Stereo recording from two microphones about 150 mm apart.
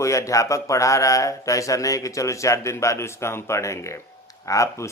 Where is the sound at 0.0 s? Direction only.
20° left (ahead or behind).